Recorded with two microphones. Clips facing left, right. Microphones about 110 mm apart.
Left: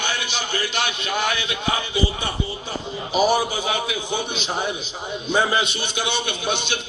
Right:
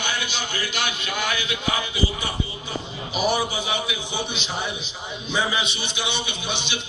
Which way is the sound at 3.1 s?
40° left (ahead or behind).